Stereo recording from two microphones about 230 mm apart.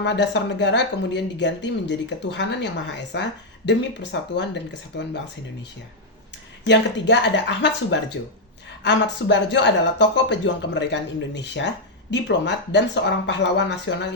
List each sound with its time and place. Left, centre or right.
0.0 s speech: left
6.7 s speech: left